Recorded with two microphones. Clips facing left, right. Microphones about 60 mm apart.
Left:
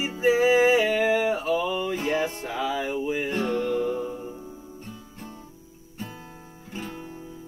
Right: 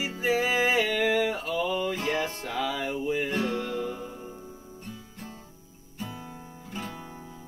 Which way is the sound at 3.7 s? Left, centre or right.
Left.